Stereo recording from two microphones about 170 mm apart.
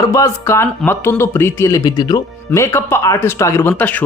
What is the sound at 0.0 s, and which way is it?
Speech, 20° left (ahead or behind).